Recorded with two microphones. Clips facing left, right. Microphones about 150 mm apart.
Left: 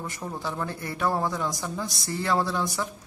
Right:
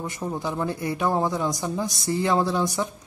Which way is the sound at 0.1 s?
20° right (ahead or behind).